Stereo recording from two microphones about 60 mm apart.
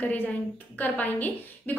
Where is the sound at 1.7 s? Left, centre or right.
Left.